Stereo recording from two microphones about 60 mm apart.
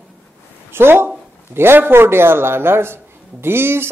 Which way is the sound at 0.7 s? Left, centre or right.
Right.